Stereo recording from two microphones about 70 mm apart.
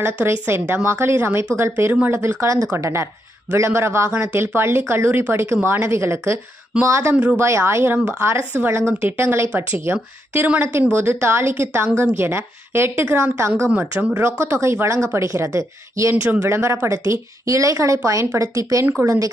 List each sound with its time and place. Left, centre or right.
0.0 s speech: right
2.4 s a woman's voice: right
2.8 s speech: right
10.6 s speech: right
13.7 s speech: right
14.2 s a woman's voice: right